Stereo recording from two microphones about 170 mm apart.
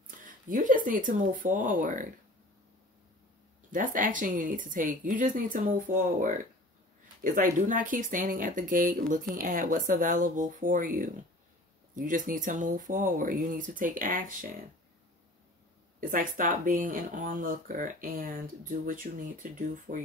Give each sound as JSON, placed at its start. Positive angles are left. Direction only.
{"t": 0.2, "sound": "speech", "side_deg": -50}
{"t": 3.7, "sound": "speech", "side_deg": -50}
{"t": 16.0, "sound": "speech", "side_deg": -55}
{"t": 19.9, "sound": "speech", "side_deg": -35}